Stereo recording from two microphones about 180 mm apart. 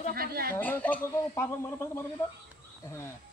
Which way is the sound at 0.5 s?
10° left (ahead or behind).